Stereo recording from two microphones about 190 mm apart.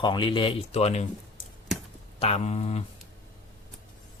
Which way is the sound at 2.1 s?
35° left (ahead or behind).